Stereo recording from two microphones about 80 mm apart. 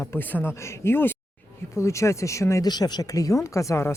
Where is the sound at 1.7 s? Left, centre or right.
Left.